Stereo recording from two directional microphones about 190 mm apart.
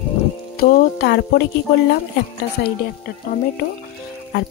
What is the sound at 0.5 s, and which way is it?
Music, 55° left (ahead or behind).